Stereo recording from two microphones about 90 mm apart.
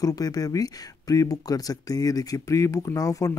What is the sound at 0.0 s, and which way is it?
Speech, 45° left (ahead or behind).